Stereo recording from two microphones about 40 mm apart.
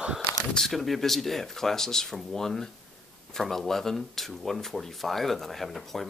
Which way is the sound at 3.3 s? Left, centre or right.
Centre.